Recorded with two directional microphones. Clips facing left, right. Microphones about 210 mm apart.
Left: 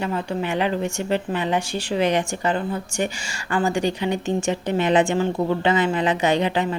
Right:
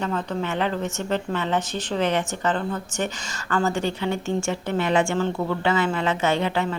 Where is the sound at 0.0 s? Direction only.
10° left (ahead or behind).